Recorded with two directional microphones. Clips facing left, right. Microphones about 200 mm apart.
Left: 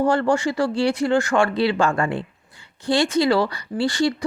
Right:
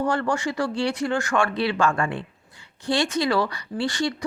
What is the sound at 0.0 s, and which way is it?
Speech, 30° left (ahead or behind).